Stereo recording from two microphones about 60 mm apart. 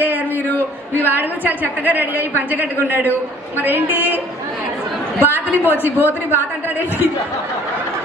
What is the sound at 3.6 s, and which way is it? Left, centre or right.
Speech, right.